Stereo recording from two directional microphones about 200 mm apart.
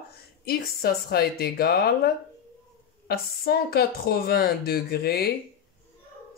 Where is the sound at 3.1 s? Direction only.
50° left (ahead or behind).